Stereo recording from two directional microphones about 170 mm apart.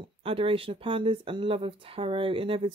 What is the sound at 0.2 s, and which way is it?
Speech, 35° right (ahead or behind).